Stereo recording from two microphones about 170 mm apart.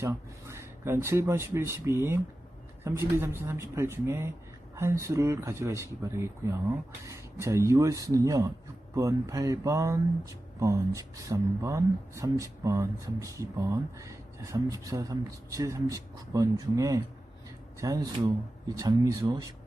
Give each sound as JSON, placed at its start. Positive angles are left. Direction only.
{"t": 0.0, "sound": "speech", "side_deg": -15}